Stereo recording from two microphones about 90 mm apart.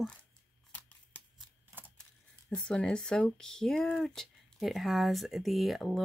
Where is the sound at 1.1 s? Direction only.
15° left (ahead or behind).